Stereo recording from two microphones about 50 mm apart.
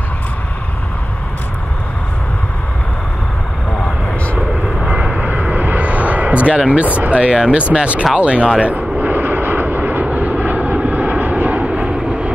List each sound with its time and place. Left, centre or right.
4.8 s vehicle: right
7.7 s speech: right
8.5 s vehicle: right